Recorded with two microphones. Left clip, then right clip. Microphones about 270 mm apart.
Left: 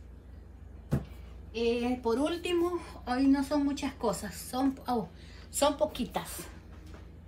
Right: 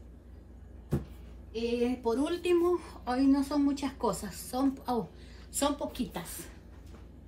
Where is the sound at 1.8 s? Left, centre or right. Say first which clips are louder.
Even; centre.